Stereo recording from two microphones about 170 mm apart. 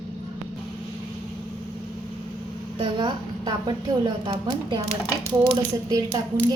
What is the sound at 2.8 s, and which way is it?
A woman's voice, 25° right (ahead or behind).